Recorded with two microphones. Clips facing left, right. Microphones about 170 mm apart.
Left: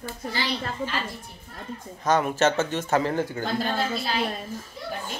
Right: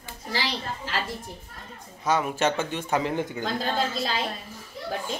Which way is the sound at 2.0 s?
10° right (ahead or behind).